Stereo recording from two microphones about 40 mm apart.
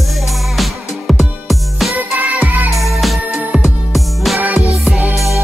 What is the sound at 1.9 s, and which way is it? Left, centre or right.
Music, right.